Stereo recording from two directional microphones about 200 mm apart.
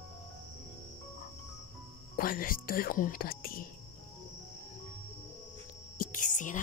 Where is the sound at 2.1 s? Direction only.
45° left (ahead or behind).